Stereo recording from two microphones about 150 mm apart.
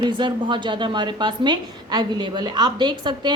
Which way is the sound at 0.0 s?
30° right (ahead or behind).